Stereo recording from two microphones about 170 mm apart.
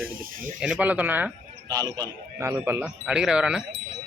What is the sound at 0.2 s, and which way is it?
Snake, 55° right (ahead or behind).